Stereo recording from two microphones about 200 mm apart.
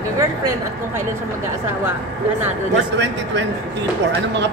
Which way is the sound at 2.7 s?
65° right (ahead or behind).